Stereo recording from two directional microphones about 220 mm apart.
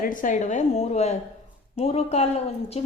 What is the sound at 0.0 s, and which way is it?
A woman's voice, 35° left (ahead or behind).